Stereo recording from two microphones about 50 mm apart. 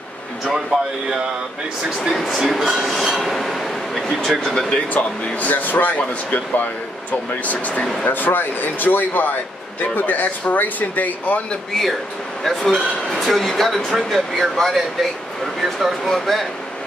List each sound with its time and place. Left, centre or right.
2.0 s speech: centre
4.9 s speech: left
12.4 s speech: centre